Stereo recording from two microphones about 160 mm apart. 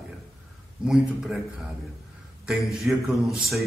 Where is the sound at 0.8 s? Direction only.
5° right (ahead or behind).